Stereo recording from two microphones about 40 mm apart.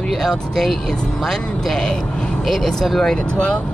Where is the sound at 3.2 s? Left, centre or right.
Left.